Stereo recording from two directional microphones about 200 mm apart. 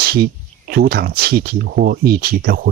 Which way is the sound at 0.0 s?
50° right (ahead or behind).